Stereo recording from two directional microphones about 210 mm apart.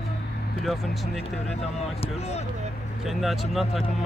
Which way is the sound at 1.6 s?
30° left (ahead or behind).